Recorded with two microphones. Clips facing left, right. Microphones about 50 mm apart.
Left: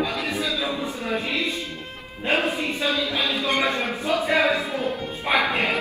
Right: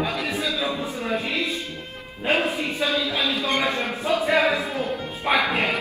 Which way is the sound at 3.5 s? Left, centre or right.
Left.